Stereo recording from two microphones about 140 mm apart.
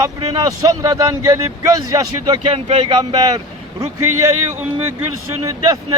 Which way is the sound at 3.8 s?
20° right (ahead or behind).